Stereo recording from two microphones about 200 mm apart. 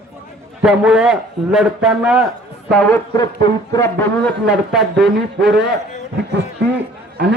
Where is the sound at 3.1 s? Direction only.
20° left (ahead or behind).